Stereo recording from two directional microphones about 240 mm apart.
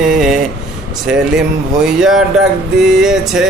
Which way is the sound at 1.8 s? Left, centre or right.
Centre.